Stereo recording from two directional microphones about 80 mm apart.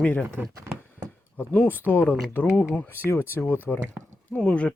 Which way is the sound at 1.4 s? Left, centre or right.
Left.